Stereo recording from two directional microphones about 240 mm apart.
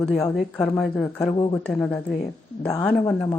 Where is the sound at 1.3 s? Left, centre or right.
Left.